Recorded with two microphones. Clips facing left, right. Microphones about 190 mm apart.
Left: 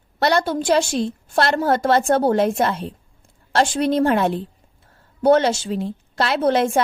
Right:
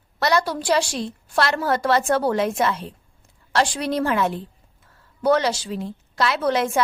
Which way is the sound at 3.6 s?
30° left (ahead or behind).